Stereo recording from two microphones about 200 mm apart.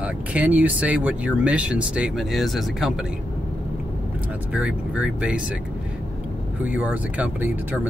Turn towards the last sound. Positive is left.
turn(degrees=-10)  # may be behind; listen again after turning